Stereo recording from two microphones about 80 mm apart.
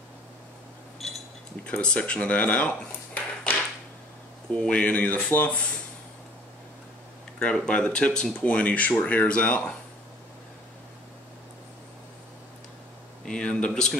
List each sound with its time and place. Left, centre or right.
1.0 s chink: centre
1.6 s speech: centre
7.3 s speech: centre
13.2 s speech: centre